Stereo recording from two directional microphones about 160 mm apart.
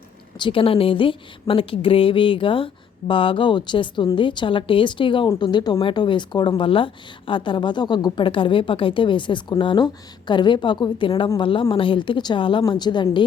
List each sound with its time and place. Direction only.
0.3 s a woman's voice: 30° left (ahead or behind)